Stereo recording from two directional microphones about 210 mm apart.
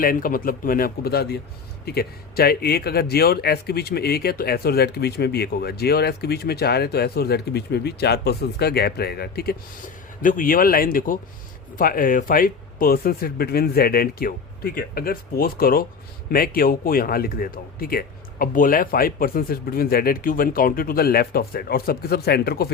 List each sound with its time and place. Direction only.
0.0 s speech: 40° left (ahead or behind)